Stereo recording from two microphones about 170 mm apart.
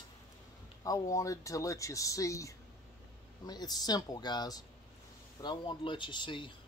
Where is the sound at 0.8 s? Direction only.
20° left (ahead or behind).